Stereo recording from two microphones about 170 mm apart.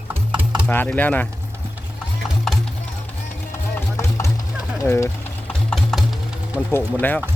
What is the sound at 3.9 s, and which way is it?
Chopping, 15° left (ahead or behind).